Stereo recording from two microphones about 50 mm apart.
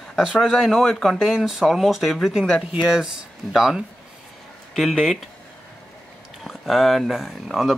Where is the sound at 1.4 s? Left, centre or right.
Centre.